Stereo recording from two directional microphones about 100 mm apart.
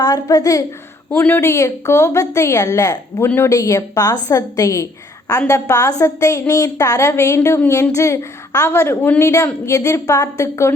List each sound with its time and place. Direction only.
0.0 s a woman's voice: 35° left (ahead or behind)
1.1 s speech: 10° left (ahead or behind)
1.4 s a woman's voice: 30° left (ahead or behind)